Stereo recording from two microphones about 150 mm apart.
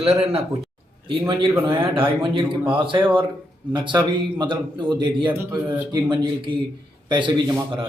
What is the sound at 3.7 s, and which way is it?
Speech, 30° right (ahead or behind).